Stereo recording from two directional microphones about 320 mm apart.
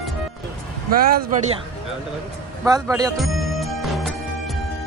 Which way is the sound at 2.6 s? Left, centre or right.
Centre.